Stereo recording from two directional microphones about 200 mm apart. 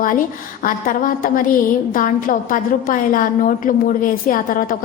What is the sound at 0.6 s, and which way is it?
A woman's voice, 45° left (ahead or behind).